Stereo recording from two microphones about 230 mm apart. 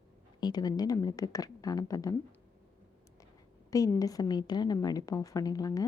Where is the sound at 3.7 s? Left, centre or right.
Centre.